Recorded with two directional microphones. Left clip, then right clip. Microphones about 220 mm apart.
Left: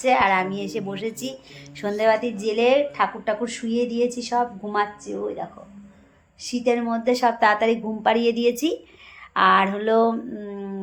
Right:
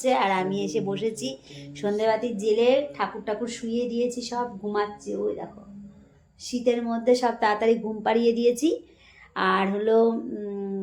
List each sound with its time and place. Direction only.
0.0 s a woman's voice: 5° left (ahead or behind)
2.0 s a woman's voice: 15° left (ahead or behind); by 4.9 s 30° left (ahead or behind)
6.4 s a woman's voice: 30° left (ahead or behind); by 10.8 s 5° left (ahead or behind)